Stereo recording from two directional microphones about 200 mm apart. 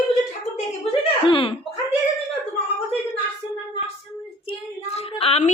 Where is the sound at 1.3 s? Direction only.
25° left (ahead or behind).